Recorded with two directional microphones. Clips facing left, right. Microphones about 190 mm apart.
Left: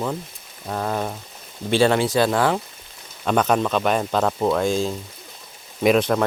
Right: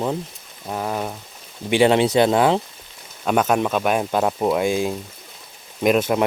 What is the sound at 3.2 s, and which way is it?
Speech, 5° right (ahead or behind).